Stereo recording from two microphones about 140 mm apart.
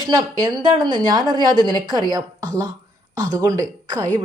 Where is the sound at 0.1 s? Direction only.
30° right (ahead or behind).